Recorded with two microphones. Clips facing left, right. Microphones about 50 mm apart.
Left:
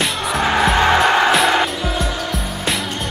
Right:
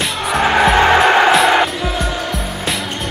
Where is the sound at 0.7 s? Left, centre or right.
Centre.